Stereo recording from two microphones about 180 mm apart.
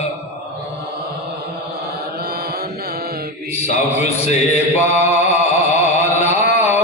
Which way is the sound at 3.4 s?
40° left (ahead or behind).